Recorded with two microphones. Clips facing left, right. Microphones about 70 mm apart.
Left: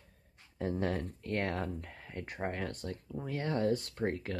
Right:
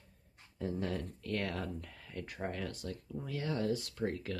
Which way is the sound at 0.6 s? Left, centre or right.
Left.